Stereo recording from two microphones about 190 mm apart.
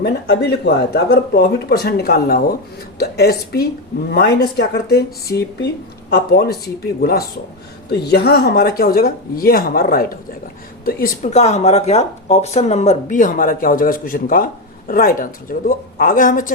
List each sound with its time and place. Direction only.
0.0 s speech: 60° left (ahead or behind)